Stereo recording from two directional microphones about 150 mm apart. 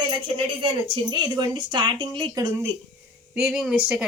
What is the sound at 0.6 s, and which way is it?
Speech, 30° right (ahead or behind).